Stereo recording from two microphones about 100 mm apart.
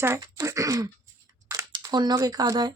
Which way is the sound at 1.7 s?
45° right (ahead or behind).